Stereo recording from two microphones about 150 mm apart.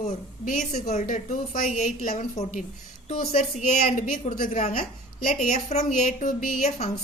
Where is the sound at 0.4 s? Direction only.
65° left (ahead or behind).